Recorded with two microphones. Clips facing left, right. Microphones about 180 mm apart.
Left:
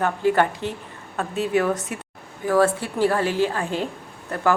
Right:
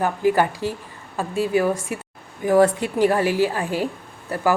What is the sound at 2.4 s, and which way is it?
A woman's voice, 15° right (ahead or behind).